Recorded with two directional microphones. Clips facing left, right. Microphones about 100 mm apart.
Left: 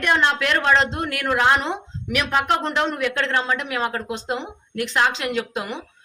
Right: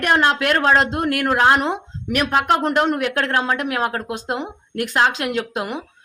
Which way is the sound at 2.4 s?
50° right (ahead or behind).